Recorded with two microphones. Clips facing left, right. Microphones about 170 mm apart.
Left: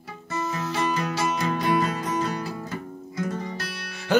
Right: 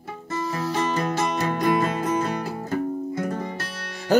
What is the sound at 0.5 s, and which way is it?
Music, 35° right (ahead or behind).